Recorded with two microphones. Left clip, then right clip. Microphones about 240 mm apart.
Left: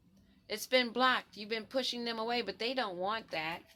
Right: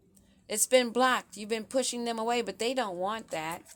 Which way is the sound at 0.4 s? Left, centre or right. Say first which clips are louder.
Right 6 dB; right.